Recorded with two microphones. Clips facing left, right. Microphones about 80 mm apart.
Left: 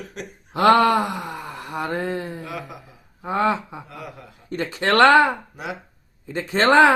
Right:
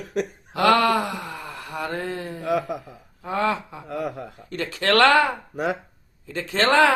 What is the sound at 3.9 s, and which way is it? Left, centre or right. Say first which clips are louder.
Speech: right 9 dB; right.